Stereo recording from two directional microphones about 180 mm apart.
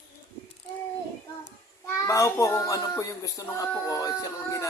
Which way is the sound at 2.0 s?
15° left (ahead or behind).